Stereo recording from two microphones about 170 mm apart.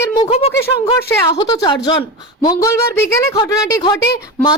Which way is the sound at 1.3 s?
25° left (ahead or behind).